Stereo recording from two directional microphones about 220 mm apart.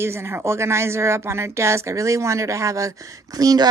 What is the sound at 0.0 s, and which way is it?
Speech, 10° right (ahead or behind).